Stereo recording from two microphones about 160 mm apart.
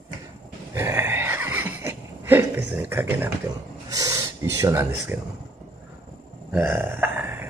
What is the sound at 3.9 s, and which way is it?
Speech, 20° right (ahead or behind).